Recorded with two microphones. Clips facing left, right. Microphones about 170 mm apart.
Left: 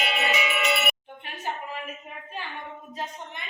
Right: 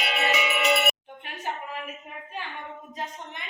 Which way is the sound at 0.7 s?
40° right (ahead or behind).